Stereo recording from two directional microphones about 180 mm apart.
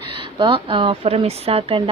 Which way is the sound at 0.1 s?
25° right (ahead or behind).